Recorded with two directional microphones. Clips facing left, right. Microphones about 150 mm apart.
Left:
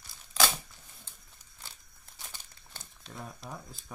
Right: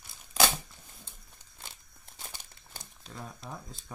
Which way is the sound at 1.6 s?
20° right (ahead or behind).